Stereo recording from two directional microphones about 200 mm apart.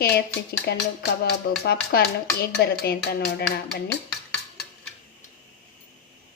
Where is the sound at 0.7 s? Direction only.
55° left (ahead or behind).